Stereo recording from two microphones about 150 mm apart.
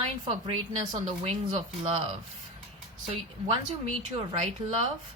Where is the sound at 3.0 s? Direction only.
45° right (ahead or behind).